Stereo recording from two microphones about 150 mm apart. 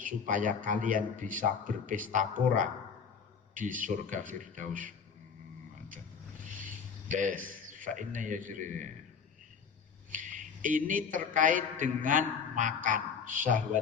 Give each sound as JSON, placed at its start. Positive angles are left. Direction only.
{"t": 0.0, "sound": "speech", "side_deg": -60}
{"t": 6.6, "sound": "a man's voice", "side_deg": -60}
{"t": 10.1, "sound": "a man's voice", "side_deg": -60}